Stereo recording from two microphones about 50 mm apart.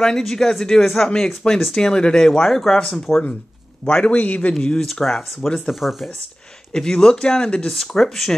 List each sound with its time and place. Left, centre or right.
0.0 s speech: centre
4.1 s a man's voice: left
4.6 s speech: centre
5.7 s speech: centre
6.7 s speech: centre
7.7 s speech: centre